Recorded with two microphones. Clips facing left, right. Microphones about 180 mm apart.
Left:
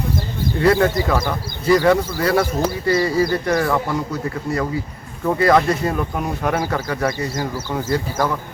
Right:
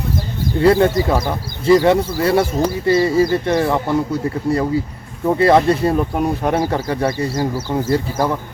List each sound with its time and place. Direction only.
0.6 s speech: 25° right (ahead or behind)